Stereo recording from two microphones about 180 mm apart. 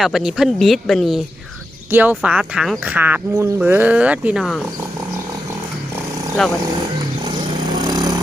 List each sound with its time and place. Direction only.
0.0 s speech: centre (ahead or behind)
6.4 s speech: centre (ahead or behind)
7.3 s vehicle: 25° right (ahead or behind)